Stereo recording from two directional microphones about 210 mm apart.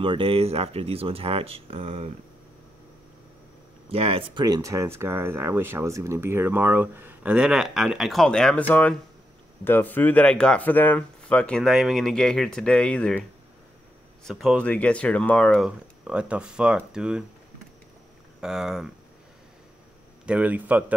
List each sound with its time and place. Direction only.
0.0 s speech: 25° right (ahead or behind)
3.9 s speech: 25° right (ahead or behind); by 13.2 s 5° left (ahead or behind)
14.2 s speech: centre (ahead or behind)
18.4 s speech: centre (ahead or behind)
20.2 s speech: 5° right (ahead or behind)